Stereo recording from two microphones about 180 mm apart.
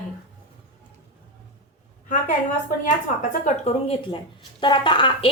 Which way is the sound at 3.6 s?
30° left (ahead or behind).